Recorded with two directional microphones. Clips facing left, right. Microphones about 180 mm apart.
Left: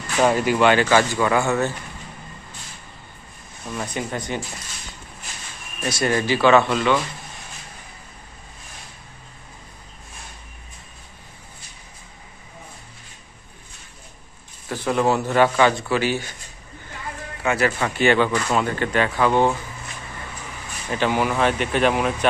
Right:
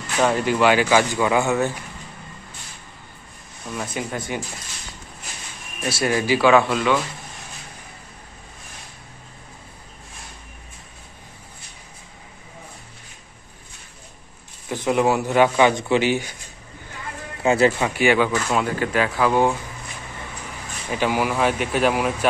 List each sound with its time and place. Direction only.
0.2 s speech: 5° left (ahead or behind)
0.6 s speech: 10° right (ahead or behind)
3.7 s speech: 5° right (ahead or behind)
5.9 s speech: 5° right (ahead or behind)
14.7 s speech: 15° right (ahead or behind)
17.4 s speech: 25° right (ahead or behind)
17.7 s speech: 10° right (ahead or behind)
20.9 s speech: 10° right (ahead or behind)